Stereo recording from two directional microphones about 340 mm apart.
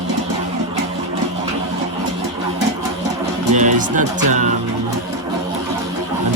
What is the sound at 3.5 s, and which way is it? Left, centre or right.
Speech, right.